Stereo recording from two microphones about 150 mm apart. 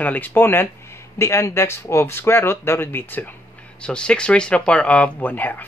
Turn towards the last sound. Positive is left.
turn(degrees=10)  # may be behind; listen again after turning